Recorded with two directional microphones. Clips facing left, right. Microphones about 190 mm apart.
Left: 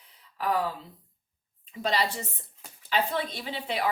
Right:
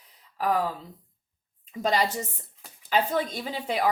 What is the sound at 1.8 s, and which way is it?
Speech, 45° right (ahead or behind).